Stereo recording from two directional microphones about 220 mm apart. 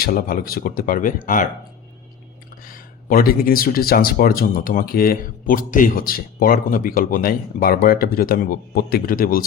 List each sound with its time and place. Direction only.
0.0 s speech: 45° left (ahead or behind)
2.6 s speech: 40° left (ahead or behind)